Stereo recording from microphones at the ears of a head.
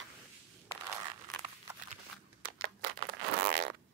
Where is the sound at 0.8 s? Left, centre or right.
Right.